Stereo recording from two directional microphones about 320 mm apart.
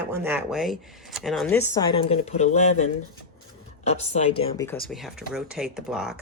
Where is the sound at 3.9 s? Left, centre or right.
Centre.